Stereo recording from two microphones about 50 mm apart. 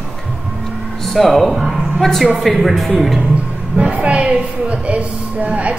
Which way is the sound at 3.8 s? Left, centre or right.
Right.